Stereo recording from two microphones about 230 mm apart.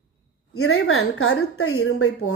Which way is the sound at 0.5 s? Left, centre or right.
Left.